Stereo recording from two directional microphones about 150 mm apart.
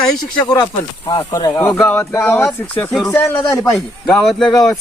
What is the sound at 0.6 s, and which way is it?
Speech, 35° left (ahead or behind).